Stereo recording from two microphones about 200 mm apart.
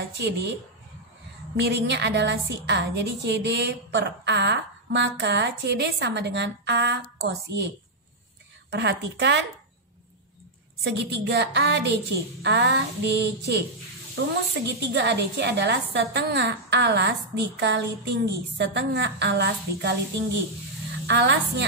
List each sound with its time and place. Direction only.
0.1 s a woman's voice: 55° right (ahead or behind)
1.6 s a woman's voice: 55° right (ahead or behind)
10.8 s a woman's voice: 60° right (ahead or behind)
14.7 s a woman's voice: 60° right (ahead or behind)
21.1 s a woman's voice: 60° right (ahead or behind)